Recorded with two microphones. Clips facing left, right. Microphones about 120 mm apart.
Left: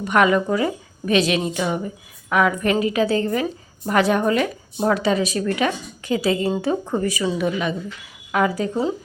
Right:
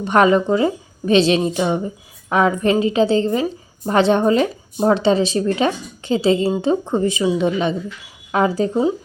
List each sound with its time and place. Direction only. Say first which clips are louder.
0.0 s a woman's voice: right 3 dB; 30° right (ahead or behind)